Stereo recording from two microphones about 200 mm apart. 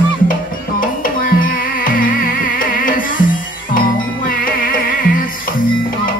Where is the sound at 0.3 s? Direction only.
45° left (ahead or behind).